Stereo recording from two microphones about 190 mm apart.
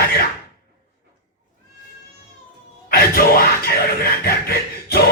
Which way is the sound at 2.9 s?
50° left (ahead or behind).